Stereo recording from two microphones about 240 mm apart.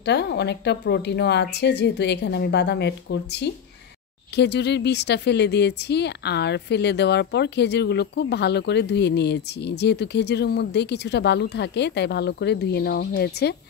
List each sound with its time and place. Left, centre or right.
0.0 s speech: left